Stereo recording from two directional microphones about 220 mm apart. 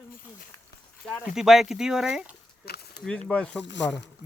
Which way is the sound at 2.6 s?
45° left (ahead or behind).